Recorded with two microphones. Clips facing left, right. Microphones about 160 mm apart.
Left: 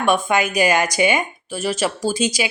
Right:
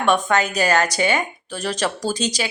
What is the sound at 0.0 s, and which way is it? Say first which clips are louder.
Speech: even; 10° left (ahead or behind).